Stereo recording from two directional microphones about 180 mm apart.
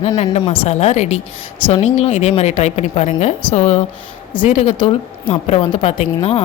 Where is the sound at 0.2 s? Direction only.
35° left (ahead or behind).